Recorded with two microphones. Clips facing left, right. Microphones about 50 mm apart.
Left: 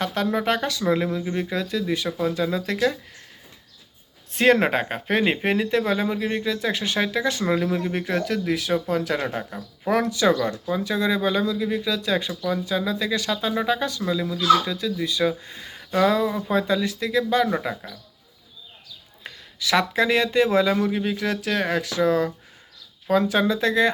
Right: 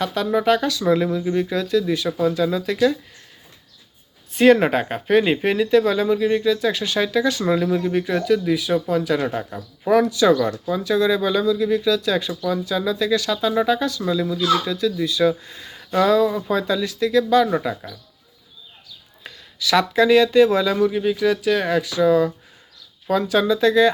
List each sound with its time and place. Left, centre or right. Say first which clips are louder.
0.0 s speech: right 4 dB; left
1.1 s speech: right 5 dB; centre
4.3 s speech: right 4 dB; left
7.4 s speech: right 3 dB; centre
7.9 s speech: right 5 dB; left
14.1 s speech: left 1 dB; centre
19.2 s speech: right 3 dB; left